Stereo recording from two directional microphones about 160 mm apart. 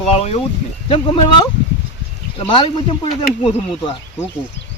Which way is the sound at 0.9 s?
30° left (ahead or behind).